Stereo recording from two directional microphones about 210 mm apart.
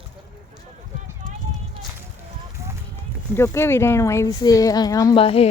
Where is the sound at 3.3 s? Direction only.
10° left (ahead or behind); by 5.5 s 25° left (ahead or behind).